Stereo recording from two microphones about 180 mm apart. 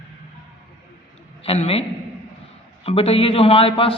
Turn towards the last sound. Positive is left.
turn(degrees=30)  # may be behind; listen again after turning